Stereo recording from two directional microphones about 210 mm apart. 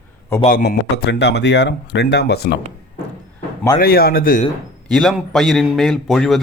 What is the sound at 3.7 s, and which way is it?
Speech, 45° left (ahead or behind).